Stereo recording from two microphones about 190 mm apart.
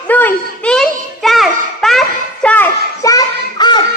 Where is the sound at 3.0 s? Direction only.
20° left (ahead or behind).